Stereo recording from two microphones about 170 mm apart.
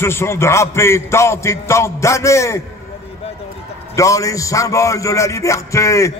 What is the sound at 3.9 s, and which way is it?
A man's voice, 20° left (ahead or behind).